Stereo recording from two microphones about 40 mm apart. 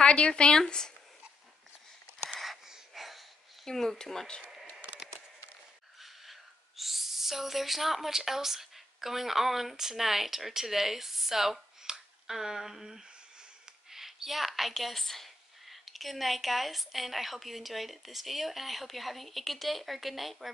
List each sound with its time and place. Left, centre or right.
0.0 s speech: left
0.7 s speech: centre
2.9 s wheeze: centre
3.6 s speech: centre
4.5 s a sound: centre
5.9 s a sound: centre
6.8 s speech: centre
11.8 s finger snapping: centre
13.8 s a woman's voice: centre